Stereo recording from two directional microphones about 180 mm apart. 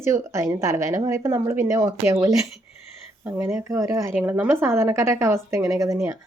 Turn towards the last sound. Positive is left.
turn(degrees=-20)  # may be behind; listen again after turning